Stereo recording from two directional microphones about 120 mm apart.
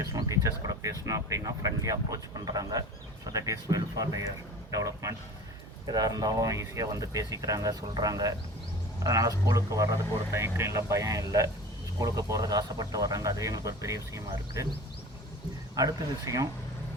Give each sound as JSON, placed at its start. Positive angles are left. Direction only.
{"t": 0.0, "sound": "speech", "side_deg": -25}